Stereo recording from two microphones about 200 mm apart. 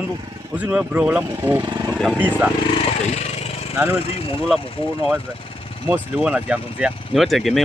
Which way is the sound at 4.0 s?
30° left (ahead or behind).